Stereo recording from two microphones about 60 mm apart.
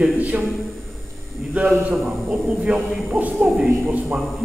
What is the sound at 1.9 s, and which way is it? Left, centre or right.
A man's voice, centre.